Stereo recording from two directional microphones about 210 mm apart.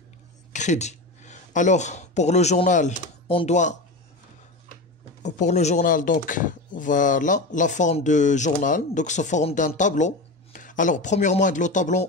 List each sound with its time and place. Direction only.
0.5 s speech: 35° left (ahead or behind)
5.2 s speech: 35° left (ahead or behind)